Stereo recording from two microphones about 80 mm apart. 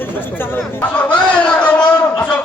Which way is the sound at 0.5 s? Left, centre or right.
Centre.